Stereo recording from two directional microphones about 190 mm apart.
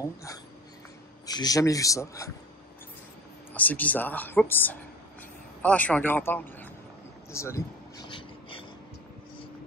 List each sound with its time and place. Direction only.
0.0 s speech: 15° left (ahead or behind)
3.5 s speech: 10° left (ahead or behind)
7.3 s a sound: 15° left (ahead or behind)